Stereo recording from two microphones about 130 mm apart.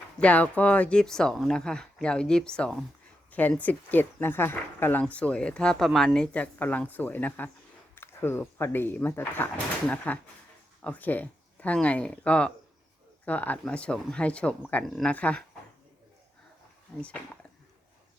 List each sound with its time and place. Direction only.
0.2 s speech: 10° left (ahead or behind)
16.9 s speech: 5° left (ahead or behind)